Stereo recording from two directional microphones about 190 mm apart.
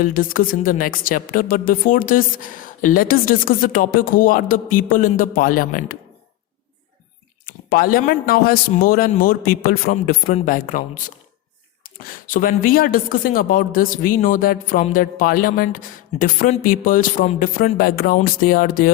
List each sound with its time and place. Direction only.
0.0 s speech: 45° left (ahead or behind)
7.7 s speech: 50° left (ahead or behind)